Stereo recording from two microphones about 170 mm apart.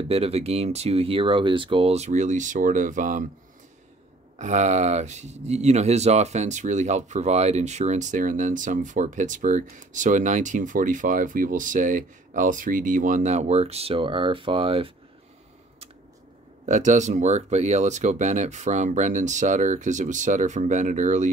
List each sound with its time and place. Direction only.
0.1 s speech: 35° right (ahead or behind)
4.4 s speech: 45° right (ahead or behind)
16.6 s speech: 45° right (ahead or behind)